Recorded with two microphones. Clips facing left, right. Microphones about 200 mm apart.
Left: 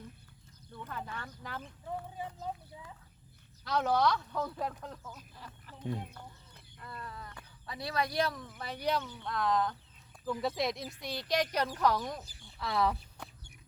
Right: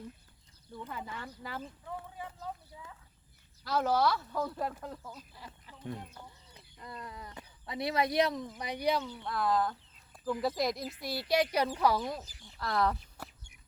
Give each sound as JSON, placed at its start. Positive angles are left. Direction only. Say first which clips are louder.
{"t": 0.7, "sound": "speech", "louder": "right 1 dB", "side_deg": -10}
{"t": 3.6, "sound": "speech", "louder": "even", "side_deg": -5}
{"t": 5.7, "sound": "speech", "louder": "left 3 dB", "side_deg": 20}
{"t": 6.1, "sound": "speech", "louder": "left 1 dB", "side_deg": -15}